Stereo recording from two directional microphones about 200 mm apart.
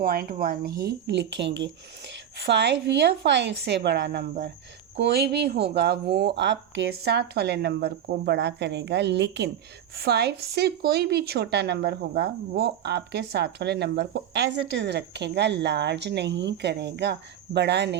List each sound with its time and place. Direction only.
0.0 s speech: 50° right (ahead or behind)